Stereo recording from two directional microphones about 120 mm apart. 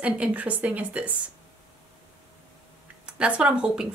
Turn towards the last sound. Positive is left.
turn(degrees=-5)  # may be behind; listen again after turning